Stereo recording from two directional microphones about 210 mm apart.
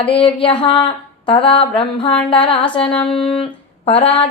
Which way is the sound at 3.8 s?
25° left (ahead or behind).